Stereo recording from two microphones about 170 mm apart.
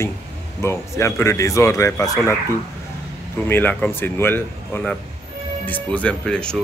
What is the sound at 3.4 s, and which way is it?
Speech, 10° left (ahead or behind).